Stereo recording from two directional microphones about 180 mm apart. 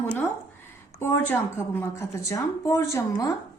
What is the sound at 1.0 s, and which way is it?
A woman's voice, 10° left (ahead or behind).